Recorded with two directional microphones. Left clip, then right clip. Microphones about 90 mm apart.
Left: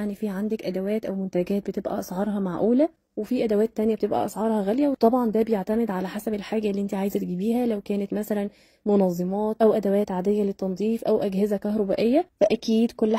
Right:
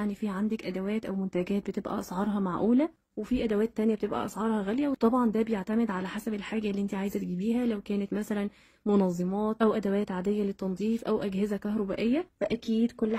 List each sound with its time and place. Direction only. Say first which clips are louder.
0.0 s a woman's voice: left 3 dB; 35° left (ahead or behind)
3.6 s speech: left 5 dB; 55° left (ahead or behind)
9.2 s a woman's voice: left 6 dB; 30° left (ahead or behind); by 11.8 s 45° left (ahead or behind)
11.9 s speech: left 9 dB; 65° left (ahead or behind); by 13.2 s 90° left